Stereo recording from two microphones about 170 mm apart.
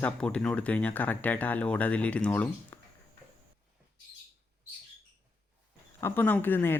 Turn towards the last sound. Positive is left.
turn(degrees=10)  # may be behind; listen again after turning